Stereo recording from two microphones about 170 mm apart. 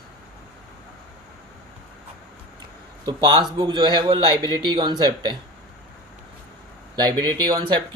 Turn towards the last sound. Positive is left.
turn(degrees=-25)  # may be behind; listen again after turning